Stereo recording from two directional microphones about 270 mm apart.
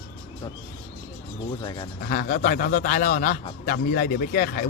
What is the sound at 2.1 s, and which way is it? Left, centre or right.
A man's voice, left.